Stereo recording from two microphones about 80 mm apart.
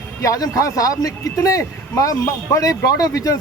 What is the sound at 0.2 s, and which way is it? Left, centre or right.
A man's voice, left.